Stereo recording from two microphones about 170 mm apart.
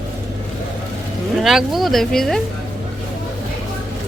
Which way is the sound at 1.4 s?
Centre (ahead or behind).